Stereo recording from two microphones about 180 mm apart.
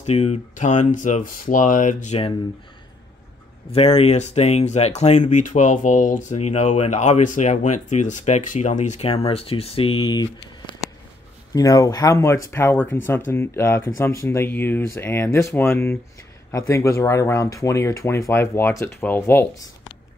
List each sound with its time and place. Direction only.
0.0 s speech: 35° left (ahead or behind)
3.7 s speech: 35° left (ahead or behind)
11.5 s speech: 20° left (ahead or behind)